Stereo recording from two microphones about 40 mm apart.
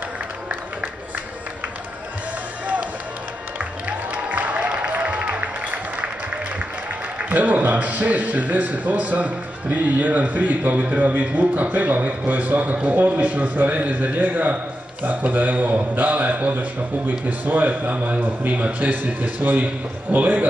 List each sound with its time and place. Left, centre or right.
4.1 s music: right
7.2 s a man's voice: right